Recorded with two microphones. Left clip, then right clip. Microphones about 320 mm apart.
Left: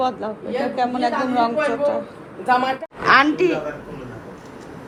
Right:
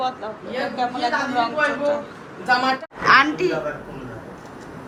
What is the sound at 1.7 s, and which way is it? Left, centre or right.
Speech, centre.